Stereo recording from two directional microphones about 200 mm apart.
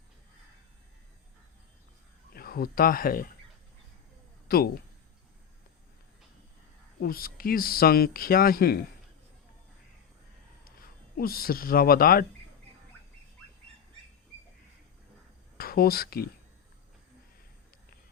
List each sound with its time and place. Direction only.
2.3 s speech: 50° left (ahead or behind)
4.4 s speech: 50° left (ahead or behind)
7.0 s speech: 45° left (ahead or behind)
11.2 s speech: 45° left (ahead or behind)
15.5 s speech: 50° left (ahead or behind)